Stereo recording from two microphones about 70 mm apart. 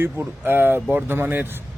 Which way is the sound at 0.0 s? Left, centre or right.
Right.